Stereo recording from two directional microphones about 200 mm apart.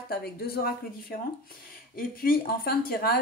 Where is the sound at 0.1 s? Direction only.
50° left (ahead or behind).